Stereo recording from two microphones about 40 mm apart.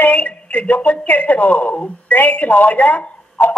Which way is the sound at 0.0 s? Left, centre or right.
Left.